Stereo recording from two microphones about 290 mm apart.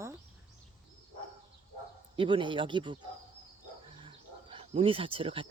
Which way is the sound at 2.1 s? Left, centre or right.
Centre.